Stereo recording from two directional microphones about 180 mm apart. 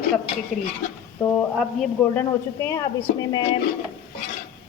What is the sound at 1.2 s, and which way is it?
Speech, 15° left (ahead or behind).